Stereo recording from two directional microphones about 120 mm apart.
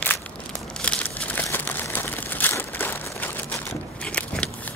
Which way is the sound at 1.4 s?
15° left (ahead or behind).